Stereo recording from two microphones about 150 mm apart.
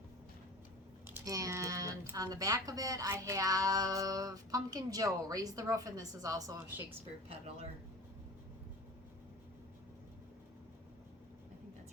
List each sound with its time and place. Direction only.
1.0 s speech: 20° right (ahead or behind)
7.3 s speech: 40° right (ahead or behind)